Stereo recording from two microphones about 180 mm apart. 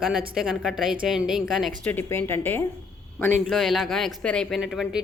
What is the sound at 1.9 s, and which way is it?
Speech, 10° left (ahead or behind).